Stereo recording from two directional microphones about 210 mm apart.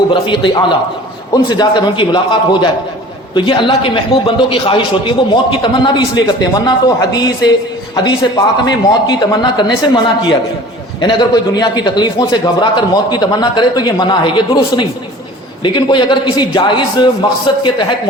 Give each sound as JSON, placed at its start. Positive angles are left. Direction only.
{"t": 0.1, "sound": "a man's voice", "side_deg": 25}
{"t": 7.9, "sound": "a man's voice", "side_deg": 20}